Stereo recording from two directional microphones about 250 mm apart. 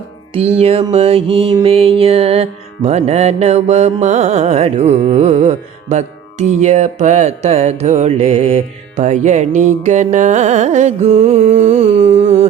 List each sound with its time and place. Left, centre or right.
0.6 s music: right